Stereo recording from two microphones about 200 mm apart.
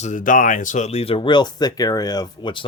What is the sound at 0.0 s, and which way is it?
Speech, 40° left (ahead or behind).